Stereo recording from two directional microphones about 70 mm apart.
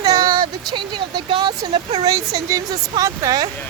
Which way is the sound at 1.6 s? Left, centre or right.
Right.